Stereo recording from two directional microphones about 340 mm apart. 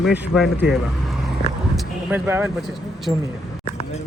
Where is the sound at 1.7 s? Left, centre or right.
Centre.